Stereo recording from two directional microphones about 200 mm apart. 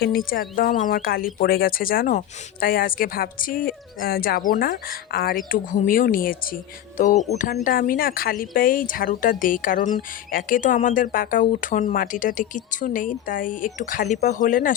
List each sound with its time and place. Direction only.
0.0 s speech: 45° left (ahead or behind)